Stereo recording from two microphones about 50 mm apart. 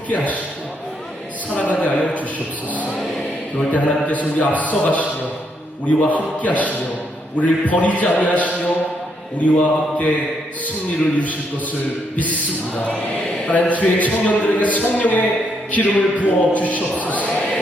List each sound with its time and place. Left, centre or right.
1.5 s a sound: left
3.6 s a man's voice: left
12.3 s speech: left